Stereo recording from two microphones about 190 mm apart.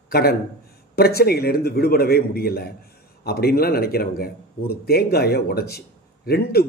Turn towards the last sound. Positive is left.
turn(degrees=55)  # may be behind; listen again after turning